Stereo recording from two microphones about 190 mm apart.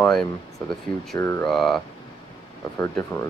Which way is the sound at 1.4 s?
Centre (ahead or behind).